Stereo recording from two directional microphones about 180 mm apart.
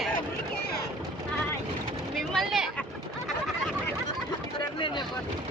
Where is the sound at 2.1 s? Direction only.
Centre (ahead or behind).